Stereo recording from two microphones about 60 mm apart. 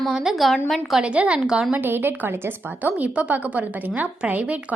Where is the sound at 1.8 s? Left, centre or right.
Right.